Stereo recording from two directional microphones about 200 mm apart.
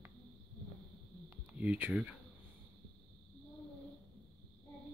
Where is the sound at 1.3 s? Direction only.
10° right (ahead or behind).